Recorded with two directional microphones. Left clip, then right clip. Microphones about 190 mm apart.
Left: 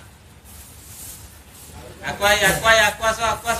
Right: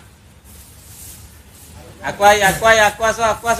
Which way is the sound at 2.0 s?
15° right (ahead or behind).